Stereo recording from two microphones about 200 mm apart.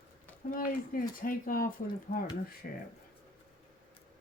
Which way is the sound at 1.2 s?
45° left (ahead or behind).